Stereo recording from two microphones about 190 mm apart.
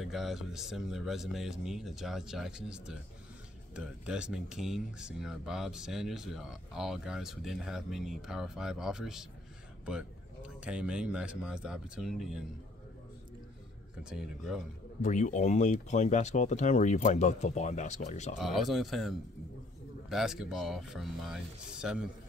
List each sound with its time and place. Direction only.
0.0 s speech: centre (ahead or behind)
14.0 s speech: centre (ahead or behind)
15.0 s speech: 40° left (ahead or behind)
18.4 s speech: centre (ahead or behind)